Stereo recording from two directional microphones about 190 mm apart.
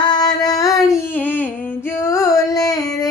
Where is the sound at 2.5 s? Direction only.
20° left (ahead or behind).